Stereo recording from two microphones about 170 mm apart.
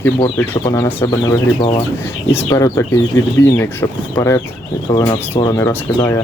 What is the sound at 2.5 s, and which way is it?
Speech, 20° left (ahead or behind).